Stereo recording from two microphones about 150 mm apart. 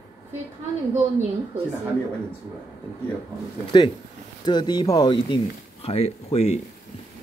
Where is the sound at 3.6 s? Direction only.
35° left (ahead or behind).